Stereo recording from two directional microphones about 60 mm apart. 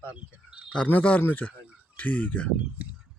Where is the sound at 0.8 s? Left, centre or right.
Left.